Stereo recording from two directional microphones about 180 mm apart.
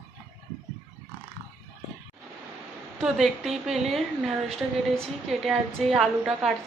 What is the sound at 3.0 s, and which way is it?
A woman's voice, centre (ahead or behind).